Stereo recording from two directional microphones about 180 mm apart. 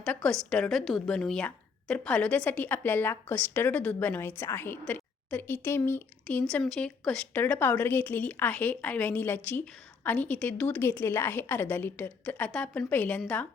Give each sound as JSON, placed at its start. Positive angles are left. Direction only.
{"t": 0.0, "sound": "speech", "side_deg": 5}